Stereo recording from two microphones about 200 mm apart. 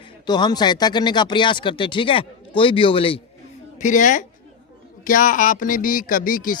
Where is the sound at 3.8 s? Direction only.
40° left (ahead or behind).